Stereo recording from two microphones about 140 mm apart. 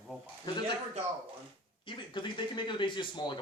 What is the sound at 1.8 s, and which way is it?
A man's voice, 35° left (ahead or behind).